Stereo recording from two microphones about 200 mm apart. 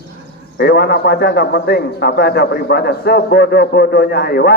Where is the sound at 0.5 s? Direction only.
55° left (ahead or behind).